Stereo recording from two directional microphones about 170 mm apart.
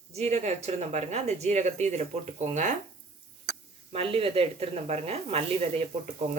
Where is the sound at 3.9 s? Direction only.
35° right (ahead or behind).